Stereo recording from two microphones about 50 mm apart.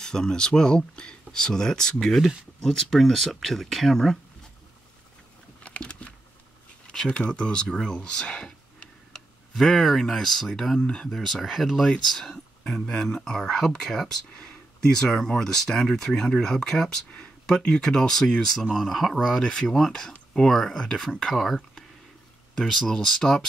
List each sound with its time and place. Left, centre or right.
0.0 s speech: centre
5.6 s a sound: left
6.9 s speech: centre
12.1 s speech: centre
19.4 s speech: centre